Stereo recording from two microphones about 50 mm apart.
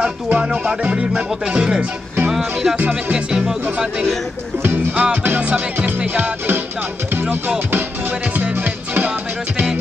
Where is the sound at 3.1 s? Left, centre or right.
Centre.